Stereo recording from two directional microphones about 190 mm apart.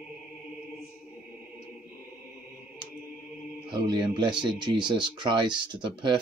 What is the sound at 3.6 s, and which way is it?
Speech, 25° right (ahead or behind).